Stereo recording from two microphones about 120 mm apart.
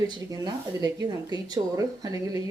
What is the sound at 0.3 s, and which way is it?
Speech, 30° right (ahead or behind).